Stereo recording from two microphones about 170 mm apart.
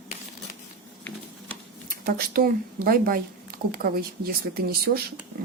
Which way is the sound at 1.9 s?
60° right (ahead or behind).